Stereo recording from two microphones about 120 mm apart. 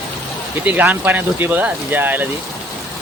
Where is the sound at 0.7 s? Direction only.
15° right (ahead or behind).